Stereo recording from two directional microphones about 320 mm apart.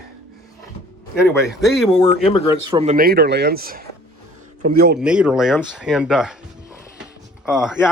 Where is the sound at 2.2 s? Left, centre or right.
Centre.